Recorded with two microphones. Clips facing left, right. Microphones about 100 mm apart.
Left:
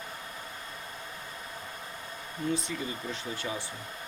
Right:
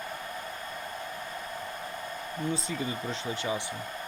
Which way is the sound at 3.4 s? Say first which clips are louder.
Right 5 dB; 20° right (ahead or behind).